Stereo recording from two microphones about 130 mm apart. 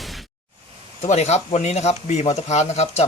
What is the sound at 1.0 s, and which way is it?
Speech, 55° left (ahead or behind).